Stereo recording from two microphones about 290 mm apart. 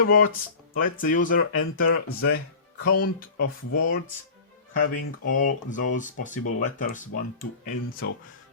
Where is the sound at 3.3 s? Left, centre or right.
Left.